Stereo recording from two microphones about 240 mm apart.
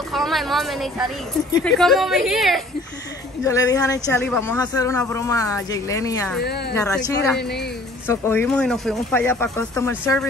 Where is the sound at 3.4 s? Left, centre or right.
Centre.